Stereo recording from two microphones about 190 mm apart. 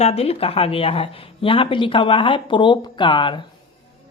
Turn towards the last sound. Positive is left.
turn(degrees=25)  # may be behind; listen again after turning